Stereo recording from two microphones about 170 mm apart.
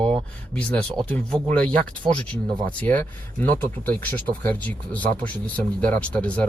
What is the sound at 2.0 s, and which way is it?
Speech, 30° right (ahead or behind).